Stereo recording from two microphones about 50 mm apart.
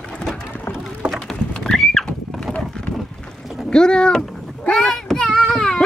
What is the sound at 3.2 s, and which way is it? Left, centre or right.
Boat, centre.